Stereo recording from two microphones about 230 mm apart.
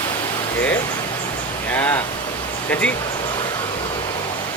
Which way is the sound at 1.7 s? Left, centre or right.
Centre.